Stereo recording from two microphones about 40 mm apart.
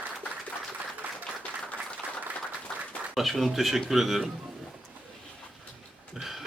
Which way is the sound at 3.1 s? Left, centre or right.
Centre.